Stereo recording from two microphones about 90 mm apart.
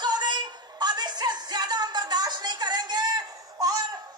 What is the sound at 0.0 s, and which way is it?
Music, 50° right (ahead or behind).